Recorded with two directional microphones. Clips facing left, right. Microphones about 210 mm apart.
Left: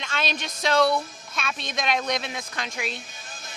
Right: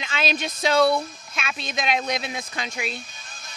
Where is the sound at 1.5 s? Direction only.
10° right (ahead or behind).